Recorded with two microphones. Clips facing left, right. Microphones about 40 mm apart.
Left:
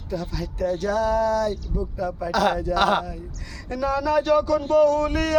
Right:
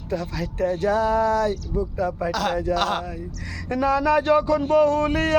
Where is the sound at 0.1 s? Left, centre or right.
Right.